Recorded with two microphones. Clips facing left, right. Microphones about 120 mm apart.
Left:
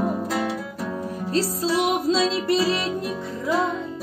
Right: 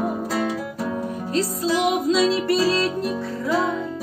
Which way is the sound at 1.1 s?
30° left (ahead or behind).